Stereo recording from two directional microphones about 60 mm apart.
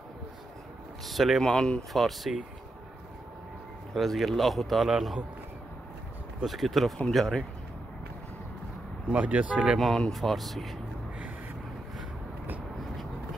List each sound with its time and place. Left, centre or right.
1.0 s speech: centre
1.4 s speech: centre
3.9 s speech: centre
6.4 s speech: centre
9.1 s speech: right
9.8 s speech: centre